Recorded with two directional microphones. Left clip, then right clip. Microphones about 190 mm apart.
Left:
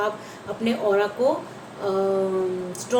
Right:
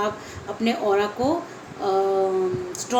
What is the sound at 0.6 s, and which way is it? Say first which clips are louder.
Speech: even; 55° right (ahead or behind).